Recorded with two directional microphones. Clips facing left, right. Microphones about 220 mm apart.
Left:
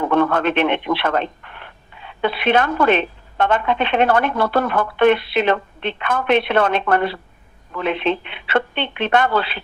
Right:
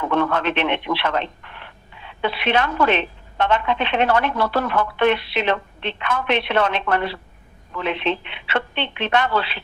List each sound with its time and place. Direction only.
0.1 s speech: 50° left (ahead or behind)